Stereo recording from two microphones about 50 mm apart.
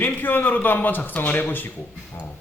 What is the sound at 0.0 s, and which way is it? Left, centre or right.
Speech, left.